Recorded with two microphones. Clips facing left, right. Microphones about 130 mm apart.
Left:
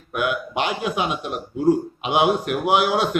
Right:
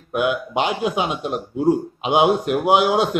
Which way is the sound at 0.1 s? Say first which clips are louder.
Right 3 dB; 25° right (ahead or behind).